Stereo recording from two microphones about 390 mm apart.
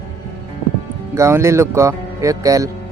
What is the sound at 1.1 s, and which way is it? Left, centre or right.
Speech, centre.